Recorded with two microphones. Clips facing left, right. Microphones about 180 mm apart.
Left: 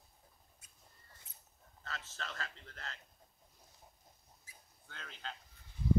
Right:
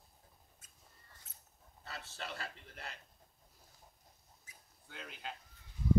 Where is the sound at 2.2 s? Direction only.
15° right (ahead or behind).